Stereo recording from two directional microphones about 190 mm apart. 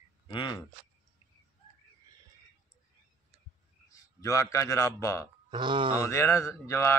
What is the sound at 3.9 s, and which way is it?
A man's voice, 15° left (ahead or behind).